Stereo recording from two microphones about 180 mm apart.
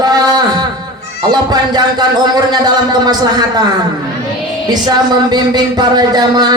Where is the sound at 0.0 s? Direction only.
20° right (ahead or behind).